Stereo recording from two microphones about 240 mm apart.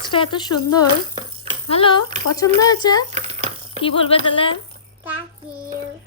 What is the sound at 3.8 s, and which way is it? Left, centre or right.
Speech, left.